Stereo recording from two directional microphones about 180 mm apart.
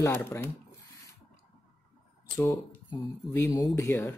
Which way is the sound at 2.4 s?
15° left (ahead or behind).